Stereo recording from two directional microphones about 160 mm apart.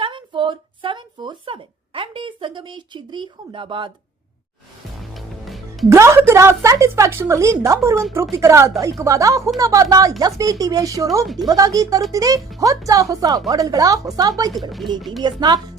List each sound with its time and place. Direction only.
0.0 s a sound: 30° right (ahead or behind)
5.1 s music: centre (ahead or behind)
5.9 s a woman's voice: 15° right (ahead or behind)
14.7 s speech: centre (ahead or behind)
15.2 s speech: 25° right (ahead or behind)